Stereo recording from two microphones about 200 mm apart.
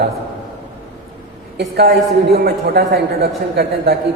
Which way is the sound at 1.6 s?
55° right (ahead or behind).